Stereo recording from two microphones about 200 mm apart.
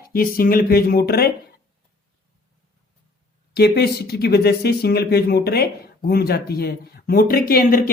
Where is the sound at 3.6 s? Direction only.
50° left (ahead or behind).